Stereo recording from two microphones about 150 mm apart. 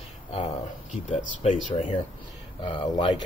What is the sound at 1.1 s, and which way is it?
Speech, 40° left (ahead or behind).